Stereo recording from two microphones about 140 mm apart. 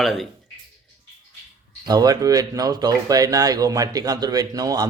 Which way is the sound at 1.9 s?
25° right (ahead or behind).